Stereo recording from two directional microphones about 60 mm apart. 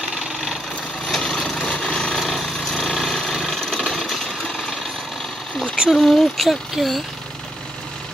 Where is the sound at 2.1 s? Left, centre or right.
Centre.